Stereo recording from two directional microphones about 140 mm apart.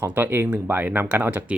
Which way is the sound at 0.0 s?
15° right (ahead or behind).